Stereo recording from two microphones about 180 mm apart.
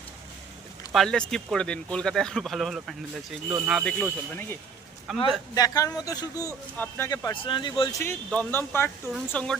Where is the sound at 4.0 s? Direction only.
10° left (ahead or behind).